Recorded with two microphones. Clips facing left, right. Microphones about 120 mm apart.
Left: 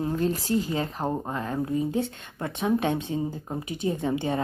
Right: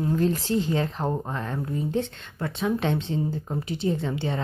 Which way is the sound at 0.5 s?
5° left (ahead or behind).